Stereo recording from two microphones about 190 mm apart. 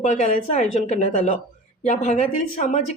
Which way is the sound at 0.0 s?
35° left (ahead or behind).